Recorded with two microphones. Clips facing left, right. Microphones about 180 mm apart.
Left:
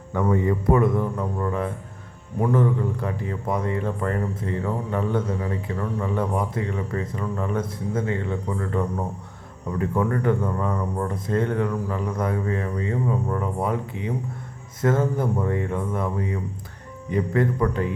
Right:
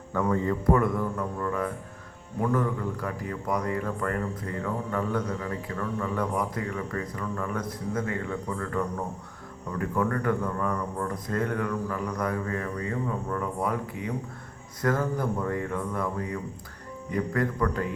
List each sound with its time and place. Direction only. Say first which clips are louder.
0.1 s a man's voice: left 4 dB; 20° left (ahead or behind)